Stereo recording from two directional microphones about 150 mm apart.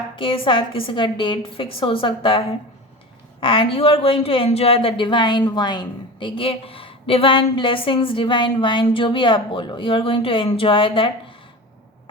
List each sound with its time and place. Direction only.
0.2 s speech: 35° left (ahead or behind)
3.4 s speech: 35° left (ahead or behind)